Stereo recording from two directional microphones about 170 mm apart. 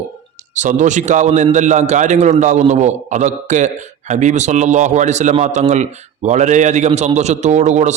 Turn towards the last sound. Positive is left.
turn(degrees=-45)  # may be behind; listen again after turning